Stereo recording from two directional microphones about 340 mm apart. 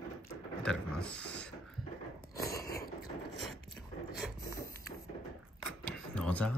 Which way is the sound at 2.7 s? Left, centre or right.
Left.